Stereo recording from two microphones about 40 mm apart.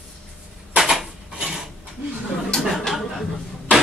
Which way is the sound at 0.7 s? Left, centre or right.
Centre.